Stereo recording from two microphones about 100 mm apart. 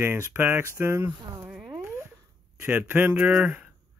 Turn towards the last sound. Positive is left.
turn(degrees=-15)  # may be behind; listen again after turning